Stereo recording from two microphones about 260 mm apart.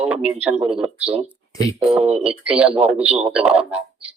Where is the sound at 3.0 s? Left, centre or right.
Right.